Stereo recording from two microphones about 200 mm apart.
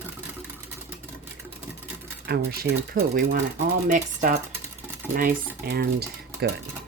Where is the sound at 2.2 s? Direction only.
50° right (ahead or behind).